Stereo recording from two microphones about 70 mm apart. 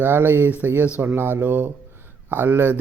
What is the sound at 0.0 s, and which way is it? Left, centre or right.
Speech, right.